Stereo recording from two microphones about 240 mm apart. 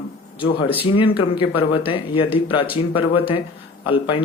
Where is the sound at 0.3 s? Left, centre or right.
Left.